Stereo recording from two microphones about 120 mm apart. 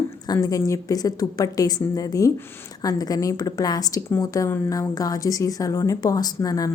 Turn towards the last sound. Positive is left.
turn(degrees=30)  # may be behind; listen again after turning